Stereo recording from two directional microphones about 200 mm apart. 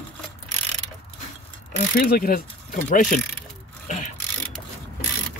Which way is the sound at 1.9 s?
50° left (ahead or behind).